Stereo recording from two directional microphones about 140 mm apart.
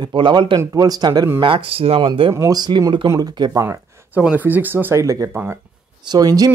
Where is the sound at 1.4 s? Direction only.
40° right (ahead or behind).